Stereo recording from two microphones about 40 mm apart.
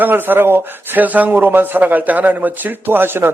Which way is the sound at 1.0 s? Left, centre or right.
Right.